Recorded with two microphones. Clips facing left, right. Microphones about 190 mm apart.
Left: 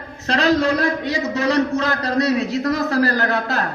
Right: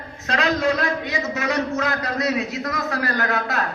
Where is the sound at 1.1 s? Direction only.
30° left (ahead or behind).